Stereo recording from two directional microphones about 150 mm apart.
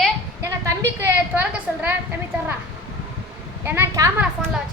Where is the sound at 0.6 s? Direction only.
15° right (ahead or behind).